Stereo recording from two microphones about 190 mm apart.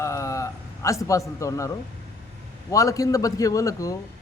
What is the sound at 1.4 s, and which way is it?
A man's voice, 15° left (ahead or behind).